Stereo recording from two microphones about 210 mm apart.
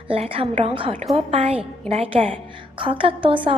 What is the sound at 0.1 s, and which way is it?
A woman's voice, 25° right (ahead or behind).